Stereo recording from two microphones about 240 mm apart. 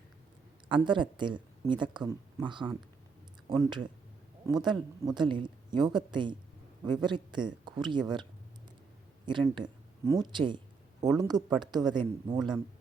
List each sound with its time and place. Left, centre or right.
0.7 s speech: centre